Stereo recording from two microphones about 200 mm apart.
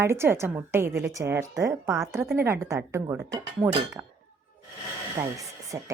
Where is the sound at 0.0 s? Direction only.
10° right (ahead or behind).